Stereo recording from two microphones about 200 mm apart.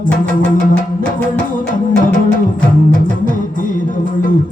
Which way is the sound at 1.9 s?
40° left (ahead or behind).